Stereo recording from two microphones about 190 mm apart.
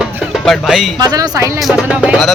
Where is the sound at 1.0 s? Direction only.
20° right (ahead or behind).